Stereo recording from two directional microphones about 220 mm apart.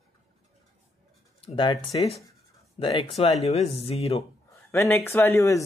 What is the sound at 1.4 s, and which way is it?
Speech, 25° left (ahead or behind).